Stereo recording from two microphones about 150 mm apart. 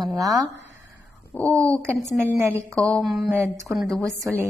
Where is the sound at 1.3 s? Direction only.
10° left (ahead or behind).